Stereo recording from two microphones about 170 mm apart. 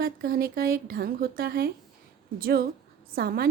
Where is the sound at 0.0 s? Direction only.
60° right (ahead or behind).